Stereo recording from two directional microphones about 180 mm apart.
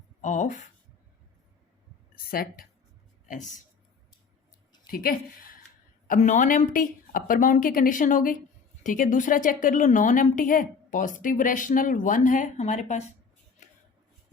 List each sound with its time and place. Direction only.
0.2 s speech: 45° left (ahead or behind)
2.3 s a woman's voice: 55° left (ahead or behind)
4.9 s a woman's voice: 55° left (ahead or behind)
6.1 s a woman's voice: 45° left (ahead or behind)
13.6 s a sound: 45° left (ahead or behind)